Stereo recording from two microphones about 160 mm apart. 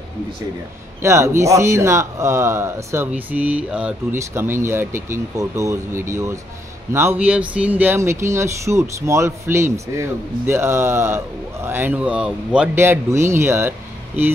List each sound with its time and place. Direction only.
1.0 s speech: 15° right (ahead or behind)